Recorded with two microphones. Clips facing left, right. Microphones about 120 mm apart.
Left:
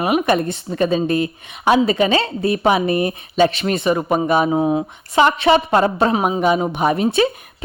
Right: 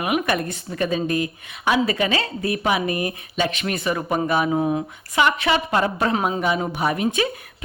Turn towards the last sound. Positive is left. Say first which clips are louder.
# left 5 dB
turn(degrees=30)  # may be behind; listen again after turning